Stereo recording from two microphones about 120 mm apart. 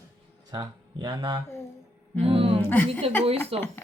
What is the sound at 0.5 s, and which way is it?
Speech, 35° right (ahead or behind).